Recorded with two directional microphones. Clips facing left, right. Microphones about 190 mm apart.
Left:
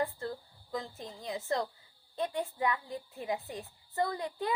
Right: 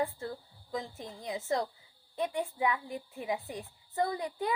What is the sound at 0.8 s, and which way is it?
A woman's voice, 20° right (ahead or behind).